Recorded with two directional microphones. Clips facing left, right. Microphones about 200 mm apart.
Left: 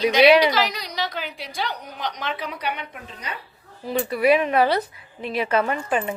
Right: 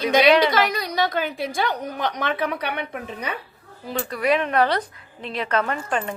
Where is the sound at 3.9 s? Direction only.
10° left (ahead or behind).